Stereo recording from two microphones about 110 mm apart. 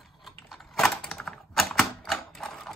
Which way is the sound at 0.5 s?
Centre (ahead or behind).